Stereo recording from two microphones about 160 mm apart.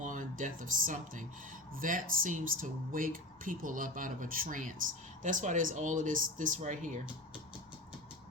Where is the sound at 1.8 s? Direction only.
55° right (ahead or behind).